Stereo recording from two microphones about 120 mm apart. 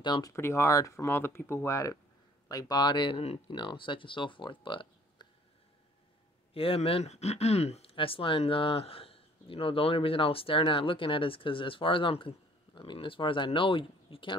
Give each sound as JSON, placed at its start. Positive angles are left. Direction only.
{"t": 0.0, "sound": "speech", "side_deg": 35}
{"t": 0.3, "sound": "speech", "side_deg": 25}
{"t": 6.5, "sound": "speech", "side_deg": 55}
{"t": 7.9, "sound": "speech", "side_deg": 50}